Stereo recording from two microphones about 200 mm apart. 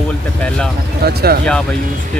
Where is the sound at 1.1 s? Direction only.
50° right (ahead or behind).